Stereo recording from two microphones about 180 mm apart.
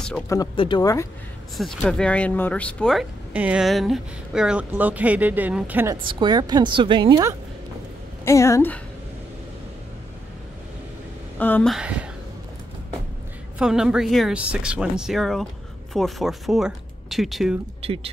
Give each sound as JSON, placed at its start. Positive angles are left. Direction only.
{"t": 0.6, "sound": "speech", "side_deg": 25}
{"t": 1.6, "sound": "speech", "side_deg": 0}
{"t": 6.0, "sound": "a woman's voice", "side_deg": -25}
{"t": 8.3, "sound": "a woman's voice", "side_deg": 15}
{"t": 11.3, "sound": "a woman's voice", "side_deg": 10}
{"t": 11.7, "sound": "speech", "side_deg": -5}
{"t": 13.6, "sound": "speech", "side_deg": -5}
{"t": 17.8, "sound": "speech", "side_deg": -30}